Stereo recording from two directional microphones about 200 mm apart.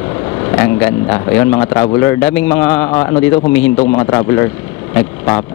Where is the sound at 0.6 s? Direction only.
15° left (ahead or behind).